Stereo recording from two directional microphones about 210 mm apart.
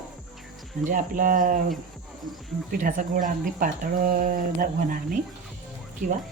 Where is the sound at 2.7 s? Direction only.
40° right (ahead or behind).